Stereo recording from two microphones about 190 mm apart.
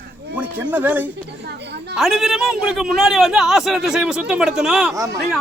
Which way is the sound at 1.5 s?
65° right (ahead or behind).